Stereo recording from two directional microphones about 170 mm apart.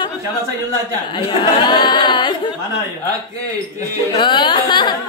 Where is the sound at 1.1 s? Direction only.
25° left (ahead or behind).